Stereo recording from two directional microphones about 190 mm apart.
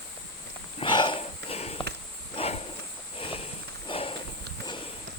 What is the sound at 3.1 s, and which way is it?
Walk, 30° left (ahead or behind).